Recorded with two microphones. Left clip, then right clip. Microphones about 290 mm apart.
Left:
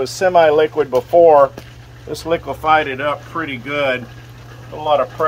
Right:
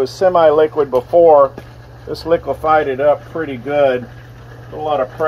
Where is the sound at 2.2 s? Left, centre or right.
Left.